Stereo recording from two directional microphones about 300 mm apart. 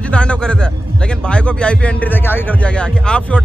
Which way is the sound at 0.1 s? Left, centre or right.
Centre.